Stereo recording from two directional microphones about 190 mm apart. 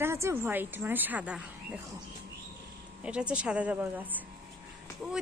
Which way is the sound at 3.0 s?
5° right (ahead or behind).